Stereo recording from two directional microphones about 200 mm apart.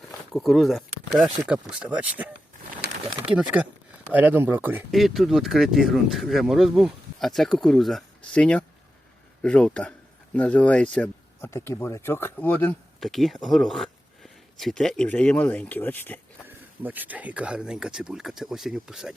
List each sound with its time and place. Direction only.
0.3 s speech: centre (ahead or behind)
2.8 s bird: 55° right (ahead or behind)
3.2 s speech: 5° right (ahead or behind); by 16.2 s 10° left (ahead or behind)
16.5 s speech: 10° right (ahead or behind)